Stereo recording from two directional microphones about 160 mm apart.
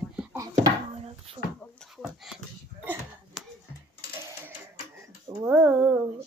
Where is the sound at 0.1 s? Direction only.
5° right (ahead or behind).